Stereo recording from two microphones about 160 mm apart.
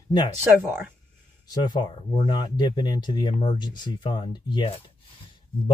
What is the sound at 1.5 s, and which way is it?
Speech, 30° left (ahead or behind).